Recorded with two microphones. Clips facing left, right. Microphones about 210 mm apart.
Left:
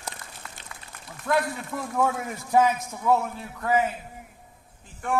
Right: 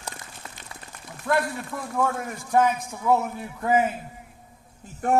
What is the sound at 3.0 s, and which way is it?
Speech, 5° right (ahead or behind).